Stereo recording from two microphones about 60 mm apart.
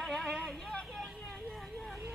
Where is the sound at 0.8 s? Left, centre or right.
Centre.